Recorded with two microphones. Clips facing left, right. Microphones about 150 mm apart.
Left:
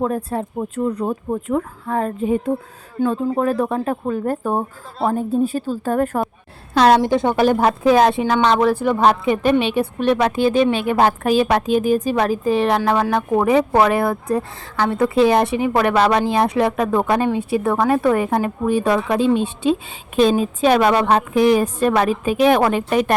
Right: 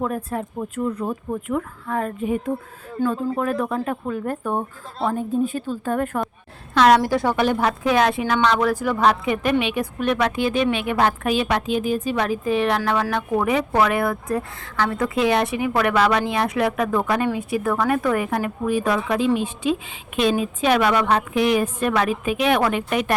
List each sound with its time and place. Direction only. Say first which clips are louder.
0.3 s a woman's voice: left 3 dB; 30° left (ahead or behind)
3.0 s a woman's voice: left 3 dB; 20° left (ahead or behind)
3.3 s a woman's voice: left 4 dB; 30° left (ahead or behind)
7.3 s a woman's voice: left 5 dB; 40° left (ahead or behind)